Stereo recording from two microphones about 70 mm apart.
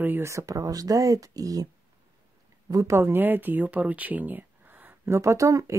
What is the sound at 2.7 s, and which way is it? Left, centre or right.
Speech, right.